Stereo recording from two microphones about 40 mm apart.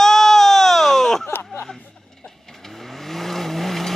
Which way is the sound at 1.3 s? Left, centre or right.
Left.